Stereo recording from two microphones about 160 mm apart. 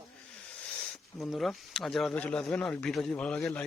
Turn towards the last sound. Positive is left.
turn(degrees=5)  # may be behind; listen again after turning